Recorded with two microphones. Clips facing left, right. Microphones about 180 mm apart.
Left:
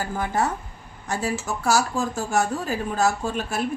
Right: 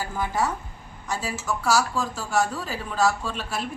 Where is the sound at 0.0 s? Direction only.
50° left (ahead or behind).